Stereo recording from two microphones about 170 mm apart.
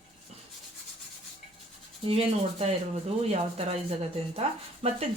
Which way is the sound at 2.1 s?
35° right (ahead or behind).